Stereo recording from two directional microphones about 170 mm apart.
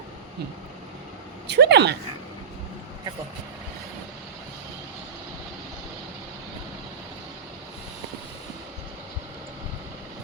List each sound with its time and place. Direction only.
1.5 s speech: 90° right